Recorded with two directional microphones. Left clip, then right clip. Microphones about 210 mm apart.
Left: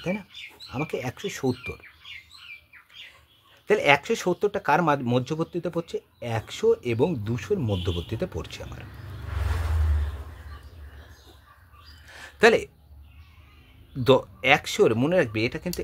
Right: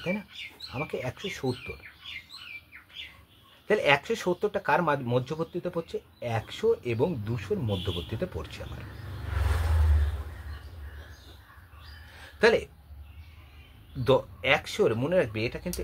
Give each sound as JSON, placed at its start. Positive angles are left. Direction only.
{"t": 0.7, "sound": "speech", "side_deg": 40}
{"t": 3.6, "sound": "speech", "side_deg": 45}
{"t": 12.1, "sound": "a sound", "side_deg": 50}
{"t": 14.0, "sound": "speech", "side_deg": 45}